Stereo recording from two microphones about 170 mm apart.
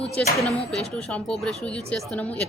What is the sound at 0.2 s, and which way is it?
Speech, 5° left (ahead or behind).